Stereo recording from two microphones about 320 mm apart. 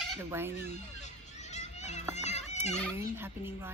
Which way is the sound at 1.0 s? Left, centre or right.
Left.